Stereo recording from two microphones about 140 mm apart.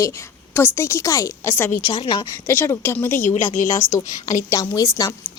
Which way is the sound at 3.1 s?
70° left (ahead or behind).